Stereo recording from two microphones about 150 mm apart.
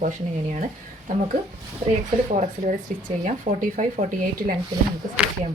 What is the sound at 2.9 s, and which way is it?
Speech, 60° right (ahead or behind).